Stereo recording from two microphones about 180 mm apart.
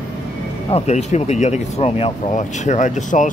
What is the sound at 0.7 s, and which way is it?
Speech, 35° left (ahead or behind).